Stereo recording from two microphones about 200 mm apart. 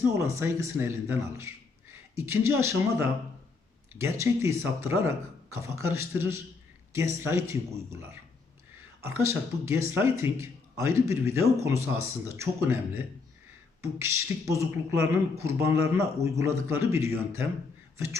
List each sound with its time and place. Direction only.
0.0 s a man's voice: 15° right (ahead or behind)
17.9 s beatboxing: 15° right (ahead or behind)